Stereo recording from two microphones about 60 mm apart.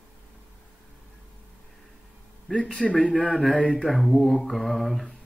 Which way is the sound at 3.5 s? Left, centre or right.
Centre.